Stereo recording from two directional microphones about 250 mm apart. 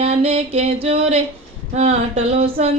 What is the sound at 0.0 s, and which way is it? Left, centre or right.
Music, right.